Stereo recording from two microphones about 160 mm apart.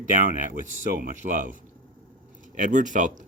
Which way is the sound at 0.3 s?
55° right (ahead or behind).